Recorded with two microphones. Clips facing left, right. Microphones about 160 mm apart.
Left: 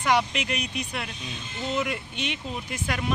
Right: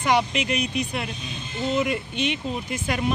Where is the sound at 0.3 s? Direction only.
Centre (ahead or behind).